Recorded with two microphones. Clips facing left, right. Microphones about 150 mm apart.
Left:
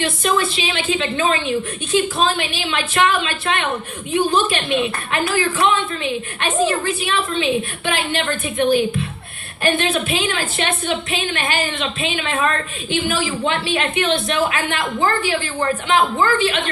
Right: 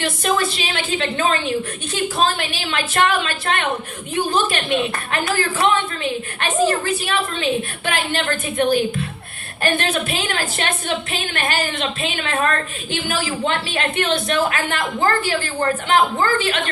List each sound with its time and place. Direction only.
0.0 s a woman's voice: 45° right (ahead or behind)